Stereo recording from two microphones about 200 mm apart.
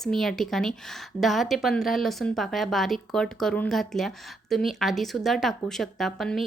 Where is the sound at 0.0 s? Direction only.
Centre (ahead or behind).